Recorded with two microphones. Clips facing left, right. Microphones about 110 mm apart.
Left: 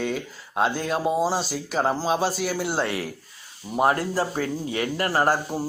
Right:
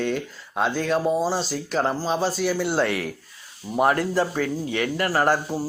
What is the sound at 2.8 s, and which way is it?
Speech, 30° left (ahead or behind).